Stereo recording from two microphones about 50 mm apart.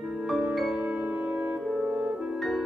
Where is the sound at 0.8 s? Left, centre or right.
Right.